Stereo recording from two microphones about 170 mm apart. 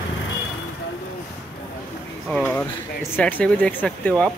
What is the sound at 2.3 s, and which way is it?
Speech, 10° left (ahead or behind).